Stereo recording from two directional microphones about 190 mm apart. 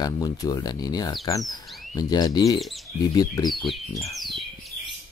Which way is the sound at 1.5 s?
Centre (ahead or behind).